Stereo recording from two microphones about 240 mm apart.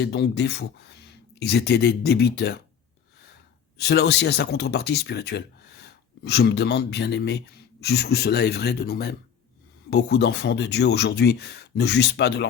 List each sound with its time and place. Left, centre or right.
0.0 s speech: left
3.8 s speech: left